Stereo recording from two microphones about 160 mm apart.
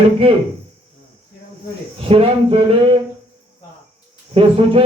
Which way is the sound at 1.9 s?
35° right (ahead or behind).